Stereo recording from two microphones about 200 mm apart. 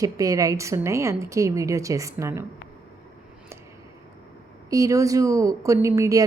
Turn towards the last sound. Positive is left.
turn(degrees=-15)  # may be behind; listen again after turning